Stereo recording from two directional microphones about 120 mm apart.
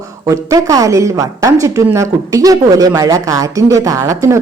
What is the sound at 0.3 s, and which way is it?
A woman's voice, 30° right (ahead or behind).